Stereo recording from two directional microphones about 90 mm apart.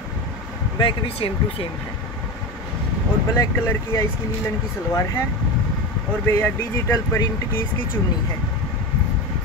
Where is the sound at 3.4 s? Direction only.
35° left (ahead or behind).